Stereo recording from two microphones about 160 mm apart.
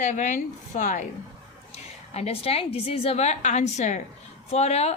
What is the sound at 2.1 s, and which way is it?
A woman's voice, 40° left (ahead or behind).